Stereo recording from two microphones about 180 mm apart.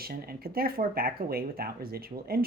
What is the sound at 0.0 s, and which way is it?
Speech, 55° right (ahead or behind).